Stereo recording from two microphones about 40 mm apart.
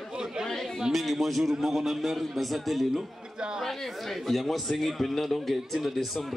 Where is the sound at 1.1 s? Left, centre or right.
Centre.